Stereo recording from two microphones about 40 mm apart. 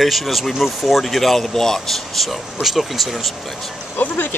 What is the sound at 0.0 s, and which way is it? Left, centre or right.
Speech, centre.